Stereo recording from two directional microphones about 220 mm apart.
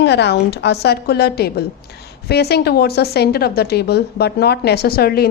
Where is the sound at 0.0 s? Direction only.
50° left (ahead or behind).